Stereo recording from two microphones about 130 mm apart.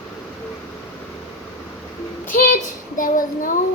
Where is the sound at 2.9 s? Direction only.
90° left.